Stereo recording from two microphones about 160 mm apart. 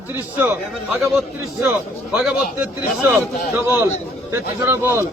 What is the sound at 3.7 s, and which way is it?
Speech, 15° right (ahead or behind).